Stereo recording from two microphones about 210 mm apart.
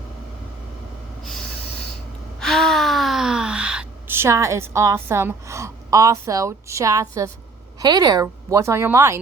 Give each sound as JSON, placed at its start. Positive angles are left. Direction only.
{"t": 2.4, "sound": "gasp", "side_deg": 0}
{"t": 7.8, "sound": "a woman's voice", "side_deg": -20}